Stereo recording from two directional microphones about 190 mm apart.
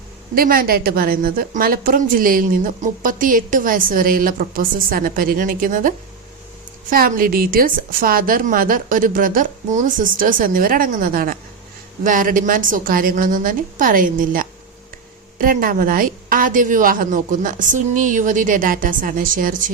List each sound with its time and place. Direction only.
0.3 s a woman's voice: 50° right (ahead or behind)
6.9 s a woman's voice: 50° right (ahead or behind)